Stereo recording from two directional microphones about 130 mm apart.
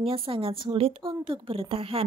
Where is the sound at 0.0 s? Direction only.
45° right (ahead or behind).